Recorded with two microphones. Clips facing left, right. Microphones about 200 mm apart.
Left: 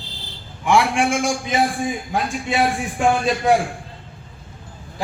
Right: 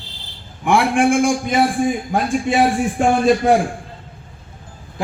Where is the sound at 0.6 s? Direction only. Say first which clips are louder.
Right 3 dB; 55° right (ahead or behind).